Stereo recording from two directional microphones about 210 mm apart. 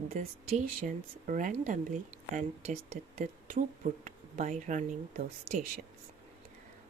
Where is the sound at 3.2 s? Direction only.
35° right (ahead or behind).